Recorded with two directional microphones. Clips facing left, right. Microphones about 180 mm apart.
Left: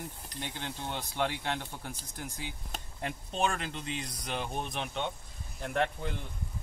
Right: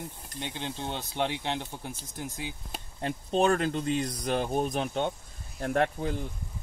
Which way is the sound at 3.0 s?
35° right (ahead or behind).